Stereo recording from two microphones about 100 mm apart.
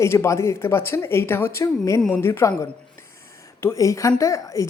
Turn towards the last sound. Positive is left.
turn(degrees=35)  # may be behind; listen again after turning